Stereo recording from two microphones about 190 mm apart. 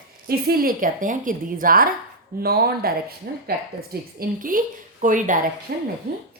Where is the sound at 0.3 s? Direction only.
55° right (ahead or behind).